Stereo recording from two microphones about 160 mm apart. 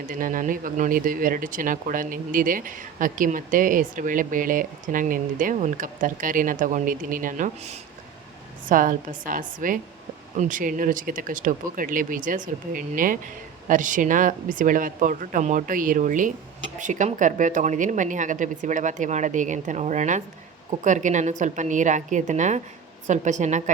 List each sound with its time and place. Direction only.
0.1 s speech: 55° right (ahead or behind)
8.6 s a woman's voice: 60° right (ahead or behind)